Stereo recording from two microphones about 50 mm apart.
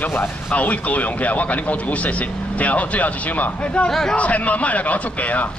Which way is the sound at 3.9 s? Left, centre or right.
Centre.